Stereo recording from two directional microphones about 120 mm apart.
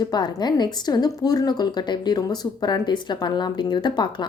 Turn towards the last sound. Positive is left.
turn(degrees=40)  # may be behind; listen again after turning